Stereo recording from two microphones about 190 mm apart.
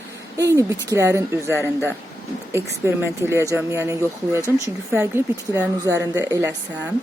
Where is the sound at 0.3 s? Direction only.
15° right (ahead or behind).